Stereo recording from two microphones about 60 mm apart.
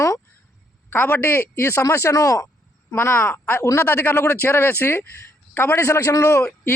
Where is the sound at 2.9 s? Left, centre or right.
Left.